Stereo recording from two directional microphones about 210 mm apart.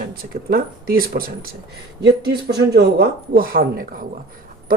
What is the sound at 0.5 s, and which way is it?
Speech, 45° right (ahead or behind).